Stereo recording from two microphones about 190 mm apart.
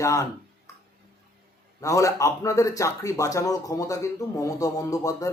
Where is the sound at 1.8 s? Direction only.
15° left (ahead or behind).